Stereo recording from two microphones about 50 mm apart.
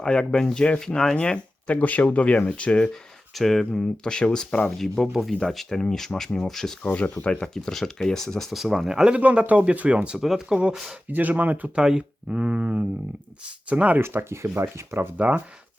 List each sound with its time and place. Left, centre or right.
0.0 s speech: centre
1.6 s speech: left
3.3 s speech: centre
3.7 s speech: centre
6.8 s speech: left
7.3 s speech: centre
9.0 s speech: right
10.2 s speech: centre
11.1 s speech: right
11.7 s speech: centre
14.0 s speech: right